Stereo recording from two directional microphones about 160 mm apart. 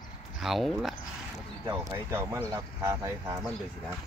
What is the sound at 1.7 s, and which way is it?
Speech, 15° right (ahead or behind).